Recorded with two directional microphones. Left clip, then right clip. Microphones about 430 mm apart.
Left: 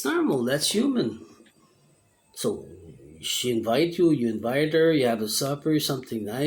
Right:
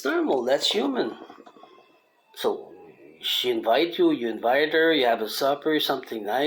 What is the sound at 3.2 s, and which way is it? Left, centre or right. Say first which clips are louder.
Speech: right 2 dB; centre.